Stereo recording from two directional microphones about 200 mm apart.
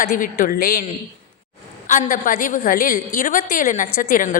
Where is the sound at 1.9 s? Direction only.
40° left (ahead or behind).